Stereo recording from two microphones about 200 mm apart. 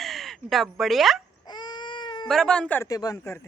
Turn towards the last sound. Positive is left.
turn(degrees=15)  # may be behind; listen again after turning